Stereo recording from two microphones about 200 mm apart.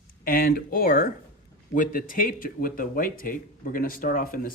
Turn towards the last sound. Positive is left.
turn(degrees=45)  # may be behind; listen again after turning